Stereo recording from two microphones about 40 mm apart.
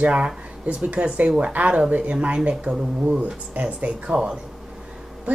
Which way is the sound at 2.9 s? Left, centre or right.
Right.